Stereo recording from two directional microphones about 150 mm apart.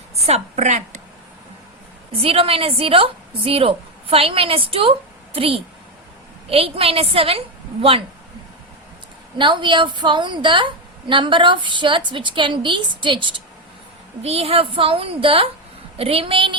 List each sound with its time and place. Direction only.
0.3 s a woman's voice: 50° right (ahead or behind)
2.2 s a woman's voice: 40° right (ahead or behind)
9.4 s a woman's voice: 30° right (ahead or behind)